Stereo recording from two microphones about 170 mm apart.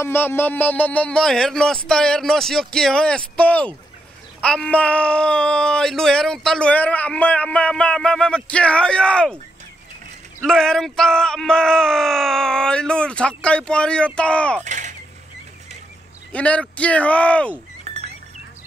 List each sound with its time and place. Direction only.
0.0 s speech: 15° left (ahead or behind)
10.4 s speech: 5° left (ahead or behind)
14.6 s mechanisms: 45° right (ahead or behind)
16.3 s speech: 5° left (ahead or behind)
17.9 s a sound: 40° right (ahead or behind)